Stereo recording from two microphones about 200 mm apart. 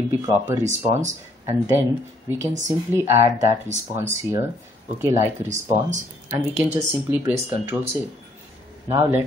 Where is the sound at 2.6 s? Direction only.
15° right (ahead or behind).